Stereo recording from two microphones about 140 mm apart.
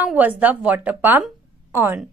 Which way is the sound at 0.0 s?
10° right (ahead or behind).